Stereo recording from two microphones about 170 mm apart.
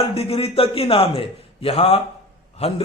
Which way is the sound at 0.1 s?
35° left (ahead or behind).